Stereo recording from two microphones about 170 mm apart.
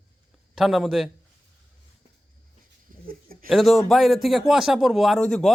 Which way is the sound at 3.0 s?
60° right (ahead or behind).